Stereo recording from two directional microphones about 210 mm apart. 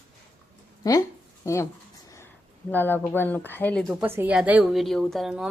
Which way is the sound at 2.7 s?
10° left (ahead or behind).